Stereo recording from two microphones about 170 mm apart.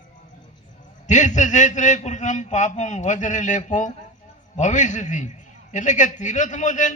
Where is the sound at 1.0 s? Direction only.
45° left (ahead or behind).